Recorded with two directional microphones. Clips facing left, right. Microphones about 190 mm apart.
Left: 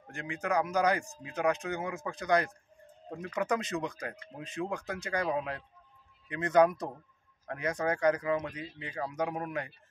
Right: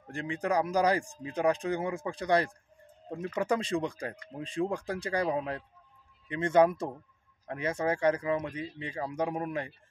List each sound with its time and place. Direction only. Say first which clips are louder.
0.1 s speech: right 2 dB; 30° right (ahead or behind)